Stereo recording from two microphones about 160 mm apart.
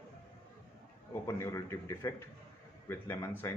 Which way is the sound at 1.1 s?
15° left (ahead or behind).